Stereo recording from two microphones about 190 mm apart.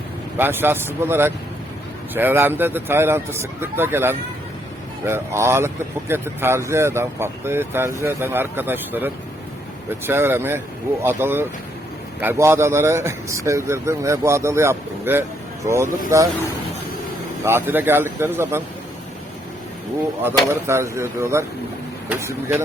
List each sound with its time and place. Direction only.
0.3 s a man's voice: 10° right (ahead or behind)
17.4 s a man's voice: 10° right (ahead or behind)
20.2 s a man's voice: 15° right (ahead or behind)